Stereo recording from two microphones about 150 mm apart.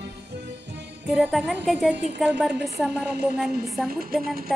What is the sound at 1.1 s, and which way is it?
Speech, 5° right (ahead or behind).